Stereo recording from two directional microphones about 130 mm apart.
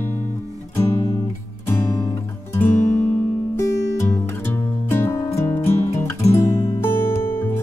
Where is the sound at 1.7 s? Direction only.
15° left (ahead or behind).